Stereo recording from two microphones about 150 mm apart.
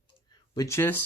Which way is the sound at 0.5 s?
20° left (ahead or behind).